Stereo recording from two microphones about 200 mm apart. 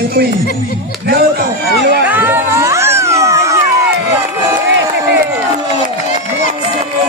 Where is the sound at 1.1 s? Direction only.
50° right (ahead or behind).